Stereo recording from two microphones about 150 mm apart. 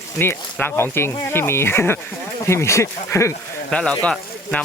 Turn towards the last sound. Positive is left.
turn(degrees=5)  # may be behind; listen again after turning